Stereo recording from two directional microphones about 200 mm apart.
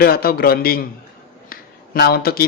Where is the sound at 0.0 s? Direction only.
50° left (ahead or behind).